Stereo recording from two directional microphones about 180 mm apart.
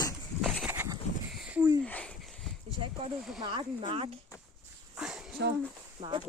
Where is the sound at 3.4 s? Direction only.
30° right (ahead or behind).